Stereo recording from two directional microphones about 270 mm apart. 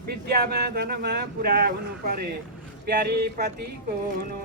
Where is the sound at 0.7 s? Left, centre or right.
Right.